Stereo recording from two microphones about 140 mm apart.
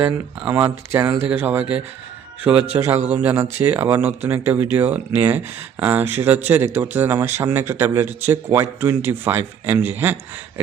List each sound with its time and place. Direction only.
0.0 s speech: 15° right (ahead or behind)